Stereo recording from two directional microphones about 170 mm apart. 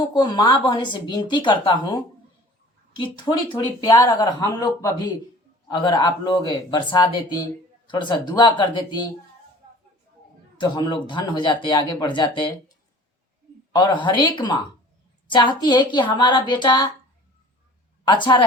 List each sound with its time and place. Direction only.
0.0 s speech: 25° left (ahead or behind)
10.6 s speech: 25° left (ahead or behind)
13.7 s speech: 25° left (ahead or behind)
18.0 s a woman's voice: 30° left (ahead or behind)